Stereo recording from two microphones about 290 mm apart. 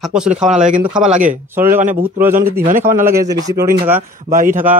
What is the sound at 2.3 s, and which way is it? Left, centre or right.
Speech, right.